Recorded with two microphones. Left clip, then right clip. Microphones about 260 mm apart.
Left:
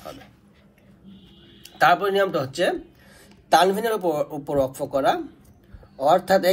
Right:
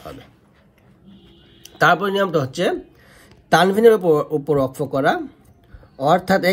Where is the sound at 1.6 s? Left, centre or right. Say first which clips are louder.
Right 2 dB; right.